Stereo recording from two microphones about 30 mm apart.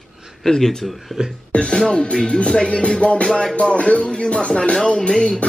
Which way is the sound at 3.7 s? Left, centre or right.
Left.